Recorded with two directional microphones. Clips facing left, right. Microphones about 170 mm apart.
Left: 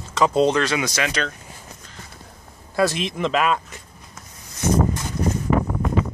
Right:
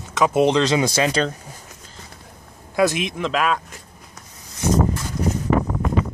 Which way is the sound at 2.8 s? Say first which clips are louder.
Right 1 dB; centre (ahead or behind).